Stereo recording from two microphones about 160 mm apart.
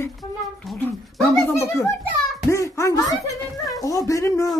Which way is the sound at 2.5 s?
20° left (ahead or behind).